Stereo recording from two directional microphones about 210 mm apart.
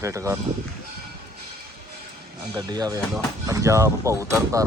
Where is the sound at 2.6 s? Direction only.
20° right (ahead or behind).